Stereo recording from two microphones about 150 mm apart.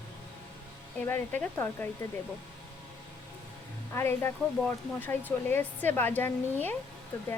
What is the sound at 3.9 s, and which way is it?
Speech, 15° left (ahead or behind).